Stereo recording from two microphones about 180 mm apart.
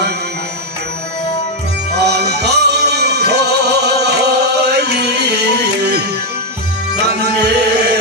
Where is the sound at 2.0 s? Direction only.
65° right (ahead or behind).